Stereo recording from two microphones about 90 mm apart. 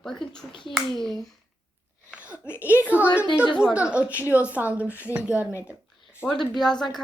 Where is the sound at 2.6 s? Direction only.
20° right (ahead or behind).